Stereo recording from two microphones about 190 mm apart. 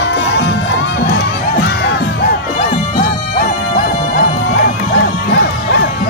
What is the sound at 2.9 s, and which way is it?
Music, 50° left (ahead or behind).